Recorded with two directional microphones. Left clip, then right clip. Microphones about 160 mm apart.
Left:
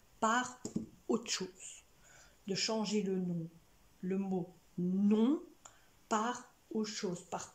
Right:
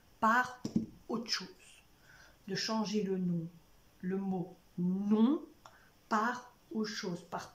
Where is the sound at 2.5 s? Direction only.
10° left (ahead or behind).